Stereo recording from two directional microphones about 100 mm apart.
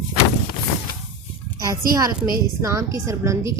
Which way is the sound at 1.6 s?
35° right (ahead or behind).